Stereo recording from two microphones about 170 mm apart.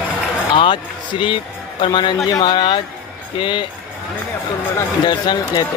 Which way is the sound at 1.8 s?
30° left (ahead or behind).